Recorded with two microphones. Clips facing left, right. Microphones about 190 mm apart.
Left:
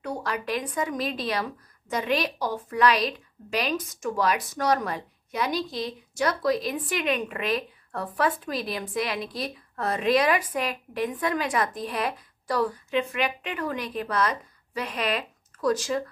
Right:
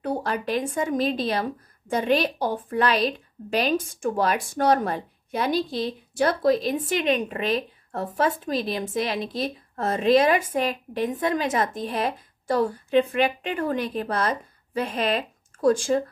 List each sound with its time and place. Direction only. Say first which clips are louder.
0.0 s a woman's voice: right 4 dB; 30° right (ahead or behind)